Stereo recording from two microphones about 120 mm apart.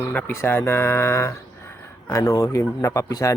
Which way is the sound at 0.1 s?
15° left (ahead or behind).